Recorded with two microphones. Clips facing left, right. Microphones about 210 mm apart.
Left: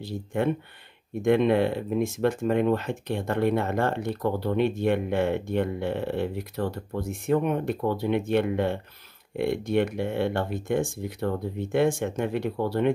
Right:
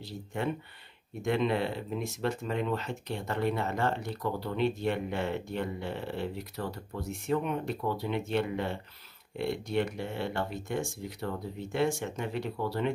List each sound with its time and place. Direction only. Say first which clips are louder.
1.2 s speech: left 8 dB; 55° left (ahead or behind)